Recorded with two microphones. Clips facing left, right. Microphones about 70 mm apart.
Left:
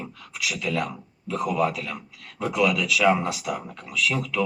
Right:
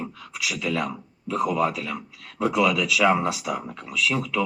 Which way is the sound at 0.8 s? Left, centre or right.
Right.